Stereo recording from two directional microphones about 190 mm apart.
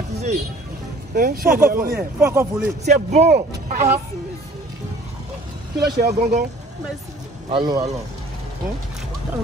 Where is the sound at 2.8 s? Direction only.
35° right (ahead or behind).